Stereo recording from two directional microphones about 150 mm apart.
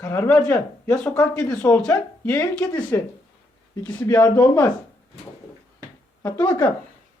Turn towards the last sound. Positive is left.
turn(degrees=20)  # may be behind; listen again after turning